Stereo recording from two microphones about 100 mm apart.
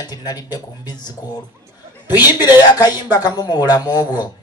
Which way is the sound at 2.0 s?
45° left (ahead or behind).